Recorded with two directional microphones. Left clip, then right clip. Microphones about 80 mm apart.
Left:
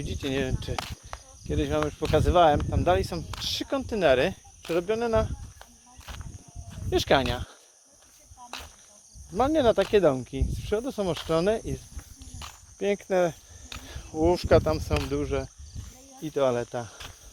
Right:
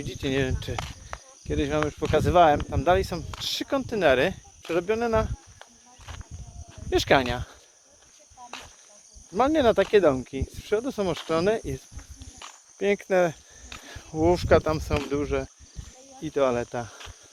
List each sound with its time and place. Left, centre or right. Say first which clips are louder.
0.0 s speech: right 2 dB; right
1.1 s cricket: right 2 dB; left
1.5 s speech: right 1 dB; right
6.9 s speech: right 2 dB; right
9.4 s speech: right 1 dB; right
12.8 s speech: right 2 dB; right
14.2 s speech: right 1 dB; centre
14.6 s speech: right 1 dB; right